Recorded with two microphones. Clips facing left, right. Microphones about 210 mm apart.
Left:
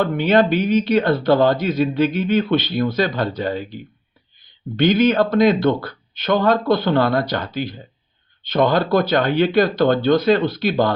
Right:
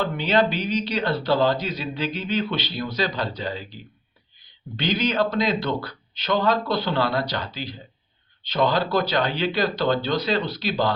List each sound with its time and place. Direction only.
0.0 s speech: 50° left (ahead or behind)
4.8 s speech: 50° left (ahead or behind)